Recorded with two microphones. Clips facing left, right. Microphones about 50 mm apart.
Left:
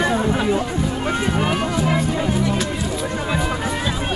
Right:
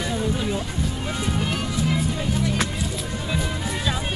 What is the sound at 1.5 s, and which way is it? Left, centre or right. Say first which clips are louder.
Music: left 5 dB; left.